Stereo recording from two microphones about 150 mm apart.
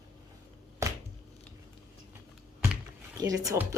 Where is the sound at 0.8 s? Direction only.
20° right (ahead or behind).